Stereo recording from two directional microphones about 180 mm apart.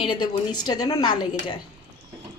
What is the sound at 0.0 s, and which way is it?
A woman's voice, 25° left (ahead or behind).